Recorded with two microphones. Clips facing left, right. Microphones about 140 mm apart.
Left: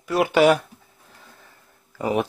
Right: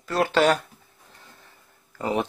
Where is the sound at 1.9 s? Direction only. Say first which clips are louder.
Left 3 dB; 10° left (ahead or behind).